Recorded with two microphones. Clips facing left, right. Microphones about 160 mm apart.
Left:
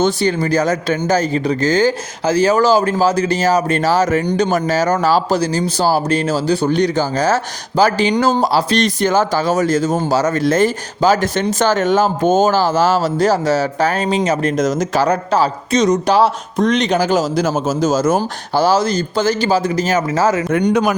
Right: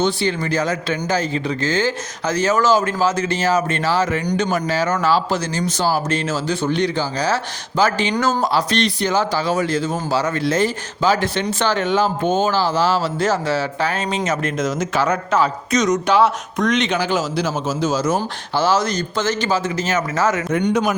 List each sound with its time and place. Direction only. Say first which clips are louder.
0.0 s a man's voice: left 4 dB; 40° left (ahead or behind)